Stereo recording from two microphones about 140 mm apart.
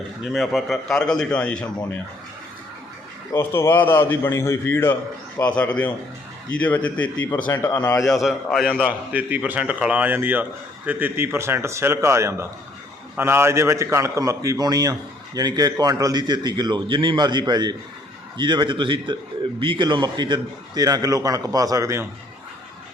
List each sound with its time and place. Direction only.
0.3 s a man's voice: centre (ahead or behind)
3.3 s a man's voice: 15° left (ahead or behind)
8.0 s a man's voice: centre (ahead or behind)
8.8 s a man's voice: 10° right (ahead or behind)